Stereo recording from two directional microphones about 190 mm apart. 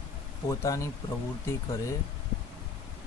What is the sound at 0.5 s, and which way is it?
Speech, 15° left (ahead or behind).